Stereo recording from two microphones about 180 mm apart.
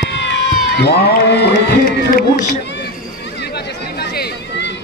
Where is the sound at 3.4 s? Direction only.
70° left (ahead or behind).